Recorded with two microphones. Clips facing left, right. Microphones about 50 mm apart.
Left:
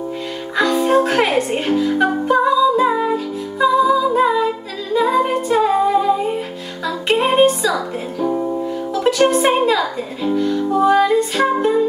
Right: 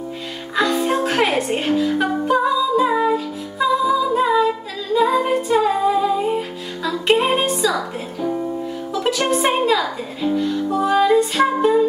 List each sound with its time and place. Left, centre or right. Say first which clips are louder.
0.6 s music: left 4 dB; centre
9.3 s speech: left 2 dB; centre